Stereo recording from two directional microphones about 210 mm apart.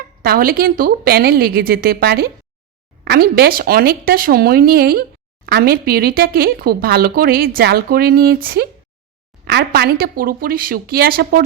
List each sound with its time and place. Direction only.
0.2 s speech: 45° right (ahead or behind)